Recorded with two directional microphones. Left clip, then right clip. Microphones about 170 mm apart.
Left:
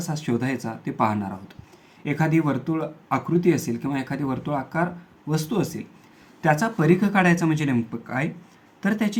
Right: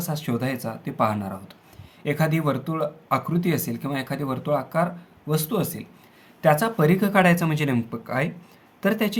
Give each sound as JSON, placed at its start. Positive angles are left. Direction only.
{"t": 0.0, "sound": "speech", "side_deg": -30}